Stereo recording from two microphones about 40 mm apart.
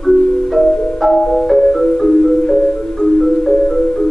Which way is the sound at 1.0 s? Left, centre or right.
Centre.